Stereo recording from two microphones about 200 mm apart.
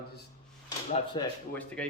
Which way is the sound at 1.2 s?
25° left (ahead or behind).